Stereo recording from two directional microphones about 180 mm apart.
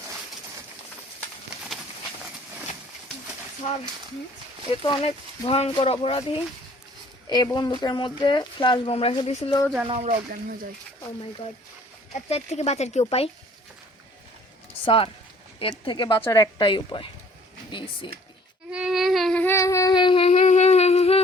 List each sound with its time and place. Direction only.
4.7 s speech: 30° left (ahead or behind)
9.8 s speech: 30° right (ahead or behind)
12.3 s speech: 35° left (ahead or behind)
14.8 s speech: 30° left (ahead or behind)
18.7 s a sound: 5° right (ahead or behind); by 21.2 s 35° left (ahead or behind)